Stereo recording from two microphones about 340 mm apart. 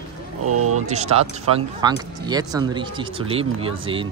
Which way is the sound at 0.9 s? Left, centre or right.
Centre.